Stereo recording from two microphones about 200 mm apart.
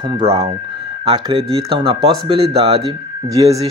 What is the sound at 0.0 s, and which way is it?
Speech, 30° right (ahead or behind).